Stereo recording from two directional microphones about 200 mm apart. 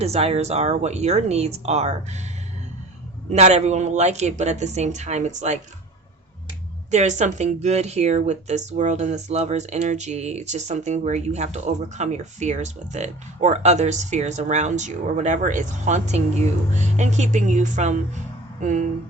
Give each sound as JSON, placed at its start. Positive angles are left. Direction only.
{"t": 0.0, "sound": "speech", "side_deg": -30}
{"t": 3.3, "sound": "speech", "side_deg": -35}
{"t": 6.9, "sound": "speech", "side_deg": -35}